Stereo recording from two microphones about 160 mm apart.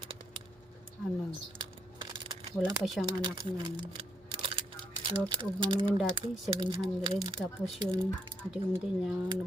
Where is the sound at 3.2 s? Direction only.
30° right (ahead or behind).